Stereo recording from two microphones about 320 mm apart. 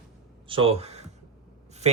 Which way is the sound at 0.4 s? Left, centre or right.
Centre.